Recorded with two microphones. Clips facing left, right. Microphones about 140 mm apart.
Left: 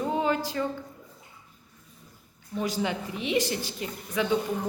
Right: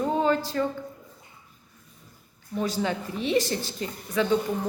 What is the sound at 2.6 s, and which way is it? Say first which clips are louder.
Speech: right 2 dB; 15° left (ahead or behind).